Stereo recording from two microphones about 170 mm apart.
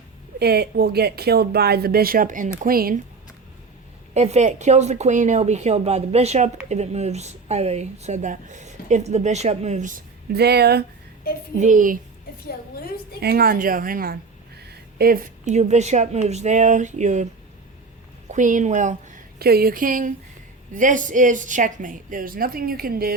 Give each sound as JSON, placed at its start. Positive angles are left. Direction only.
{"t": 0.3, "sound": "speech", "side_deg": -70}
{"t": 4.1, "sound": "speech", "side_deg": -40}
{"t": 10.3, "sound": "speech", "side_deg": -70}
{"t": 11.6, "sound": "a woman's voice", "side_deg": -50}
{"t": 12.5, "sound": "a woman's voice", "side_deg": 65}
{"t": 13.1, "sound": "a woman's voice", "side_deg": -65}
{"t": 18.3, "sound": "a woman's voice", "side_deg": -50}
{"t": 19.4, "sound": "a woman's voice", "side_deg": -65}